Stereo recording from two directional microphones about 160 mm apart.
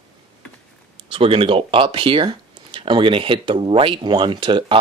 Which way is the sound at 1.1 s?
35° right (ahead or behind).